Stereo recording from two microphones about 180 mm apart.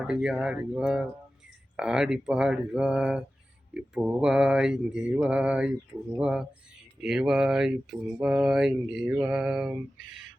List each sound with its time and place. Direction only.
0.0 s speech: 5° right (ahead or behind)
7.0 s speech: centre (ahead or behind)